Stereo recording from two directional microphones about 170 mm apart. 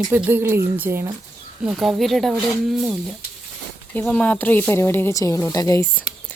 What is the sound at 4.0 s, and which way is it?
Speech, 10° left (ahead or behind).